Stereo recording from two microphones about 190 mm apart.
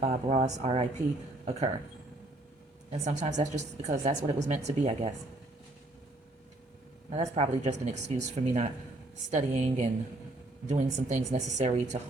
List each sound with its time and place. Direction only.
0.0 s speech: 35° right (ahead or behind)
3.0 s speech: 35° right (ahead or behind)
7.1 s speech: 35° right (ahead or behind)